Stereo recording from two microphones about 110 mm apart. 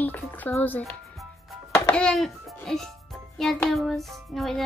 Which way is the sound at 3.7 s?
Centre (ahead or behind).